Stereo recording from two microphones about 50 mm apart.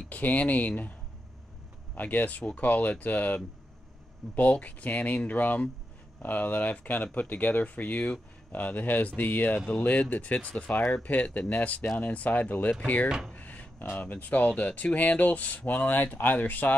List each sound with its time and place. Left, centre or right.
0.1 s speech: left
2.0 s speech: left
13.3 s a sound: left
13.9 s speech: left